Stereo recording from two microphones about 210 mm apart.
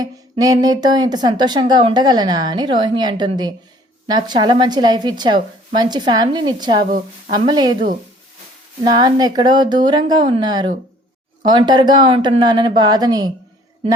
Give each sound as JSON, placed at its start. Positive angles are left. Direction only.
{"t": 0.0, "sound": "speech", "side_deg": -20}